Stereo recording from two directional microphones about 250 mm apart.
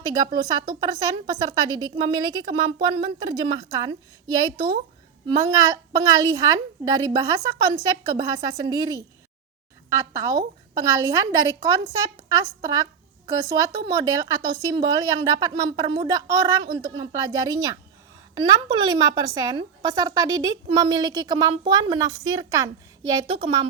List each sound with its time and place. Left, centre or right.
0.1 s a woman's voice: centre
5.3 s a woman's voice: centre